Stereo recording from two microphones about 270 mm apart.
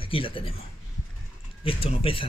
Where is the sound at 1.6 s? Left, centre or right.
Centre.